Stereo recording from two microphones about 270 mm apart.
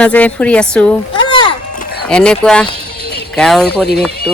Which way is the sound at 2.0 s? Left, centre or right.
Centre.